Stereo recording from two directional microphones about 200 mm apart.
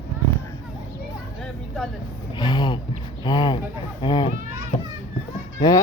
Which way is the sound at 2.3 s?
20° left (ahead or behind).